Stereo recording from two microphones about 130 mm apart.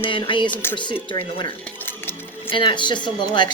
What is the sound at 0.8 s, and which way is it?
Speech, 35° left (ahead or behind).